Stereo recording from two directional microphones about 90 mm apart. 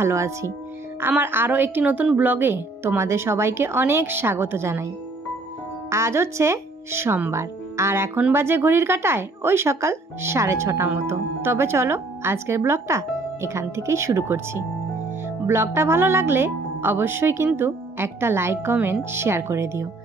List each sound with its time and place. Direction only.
0.0 s speech: 30° right (ahead or behind)
5.9 s speech: 30° right (ahead or behind)